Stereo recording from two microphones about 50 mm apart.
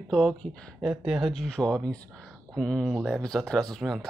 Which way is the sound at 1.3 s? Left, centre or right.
Centre.